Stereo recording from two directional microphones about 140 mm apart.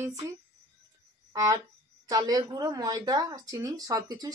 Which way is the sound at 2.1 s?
30° right (ahead or behind).